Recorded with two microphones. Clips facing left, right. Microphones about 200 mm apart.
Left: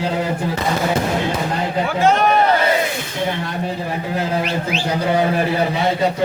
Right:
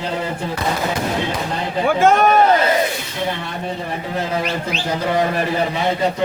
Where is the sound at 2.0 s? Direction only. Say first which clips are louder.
Right 1 dB; 50° right (ahead or behind).